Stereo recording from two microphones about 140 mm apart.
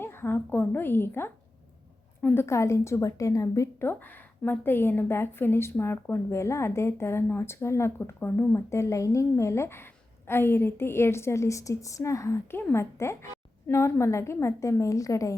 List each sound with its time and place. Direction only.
0.0 s a woman's voice: 15° left (ahead or behind)